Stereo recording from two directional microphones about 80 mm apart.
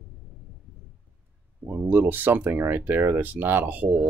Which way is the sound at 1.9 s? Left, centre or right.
Right.